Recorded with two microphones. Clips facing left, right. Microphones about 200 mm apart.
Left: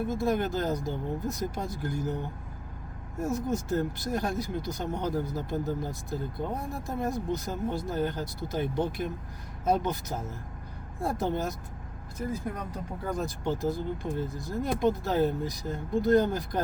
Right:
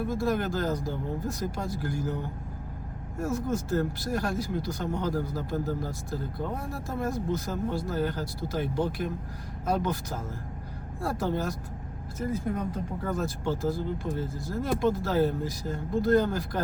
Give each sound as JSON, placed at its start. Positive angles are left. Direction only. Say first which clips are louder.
{"t": 0.1, "sound": "speech", "louder": "even", "side_deg": 20}
{"t": 13.1, "sound": "speech", "louder": "even", "side_deg": 15}